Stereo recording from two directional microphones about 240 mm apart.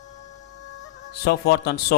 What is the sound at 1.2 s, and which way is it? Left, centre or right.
Speech, left.